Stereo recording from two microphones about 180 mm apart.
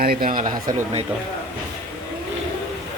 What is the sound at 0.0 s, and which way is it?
Speech, 55° right (ahead or behind).